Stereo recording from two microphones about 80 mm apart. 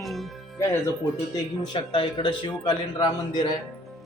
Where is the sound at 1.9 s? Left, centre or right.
Left.